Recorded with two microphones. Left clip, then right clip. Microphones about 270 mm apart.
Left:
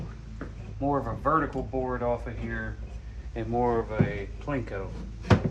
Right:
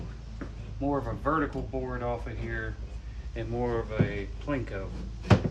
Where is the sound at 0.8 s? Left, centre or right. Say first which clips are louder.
Left 3 dB; centre.